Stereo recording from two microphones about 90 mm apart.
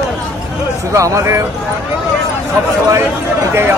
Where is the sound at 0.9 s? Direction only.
35° right (ahead or behind).